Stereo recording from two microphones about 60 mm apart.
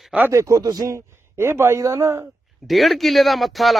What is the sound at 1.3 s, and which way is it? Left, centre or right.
Speech, right.